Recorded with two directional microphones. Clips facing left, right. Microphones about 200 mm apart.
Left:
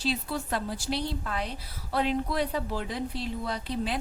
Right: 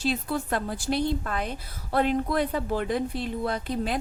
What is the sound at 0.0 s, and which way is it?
A woman's voice, 50° right (ahead or behind).